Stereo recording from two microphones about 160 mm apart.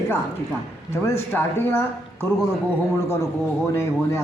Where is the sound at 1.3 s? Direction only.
15° left (ahead or behind).